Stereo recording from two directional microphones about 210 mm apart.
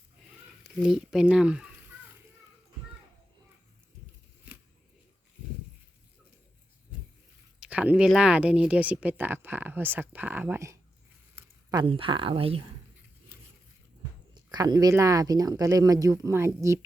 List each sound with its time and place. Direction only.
0.6 s speech: centre (ahead or behind)
7.6 s speech: 5° right (ahead or behind)
11.7 s speech: 20° right (ahead or behind)
14.3 s speech: 20° right (ahead or behind)